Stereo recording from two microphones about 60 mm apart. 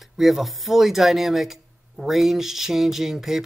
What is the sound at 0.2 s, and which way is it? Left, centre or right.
Speech, centre.